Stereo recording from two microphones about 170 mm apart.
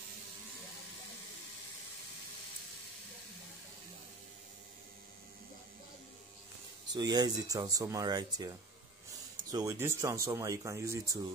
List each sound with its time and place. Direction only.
7.0 s speech: 25° right (ahead or behind)